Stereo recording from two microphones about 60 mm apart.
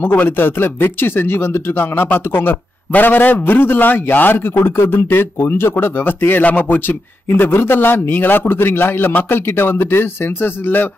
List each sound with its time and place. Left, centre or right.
0.0 s a man's voice: left